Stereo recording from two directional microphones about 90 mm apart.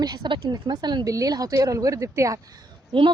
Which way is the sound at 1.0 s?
40° right (ahead or behind).